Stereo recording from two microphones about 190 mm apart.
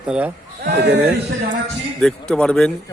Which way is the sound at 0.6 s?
60° right (ahead or behind).